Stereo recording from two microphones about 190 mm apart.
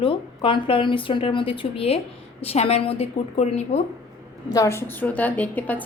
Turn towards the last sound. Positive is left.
turn(degrees=10)  # may be behind; listen again after turning